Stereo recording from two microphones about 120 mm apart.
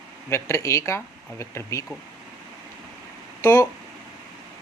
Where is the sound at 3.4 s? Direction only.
25° left (ahead or behind).